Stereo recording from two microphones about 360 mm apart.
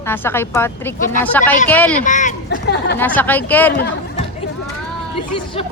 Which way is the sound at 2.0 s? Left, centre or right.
Left.